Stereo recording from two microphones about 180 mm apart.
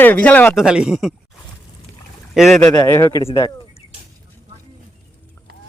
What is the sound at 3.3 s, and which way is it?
Speech, 25° left (ahead or behind).